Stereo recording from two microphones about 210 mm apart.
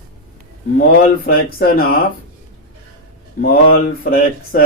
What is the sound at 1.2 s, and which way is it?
Speech, 45° left (ahead or behind).